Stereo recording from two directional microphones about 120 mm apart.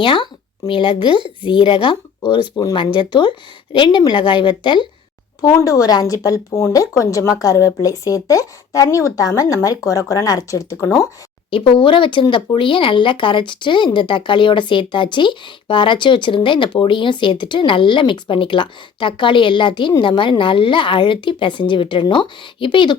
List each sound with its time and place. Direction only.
0.0 s speech: 45° left (ahead or behind)
5.4 s a woman's voice: 30° left (ahead or behind)
11.5 s speech: 45° left (ahead or behind)